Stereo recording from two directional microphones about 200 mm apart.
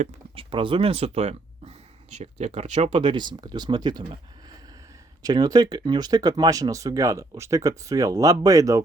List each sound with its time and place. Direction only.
0.0 s speech: 25° right (ahead or behind)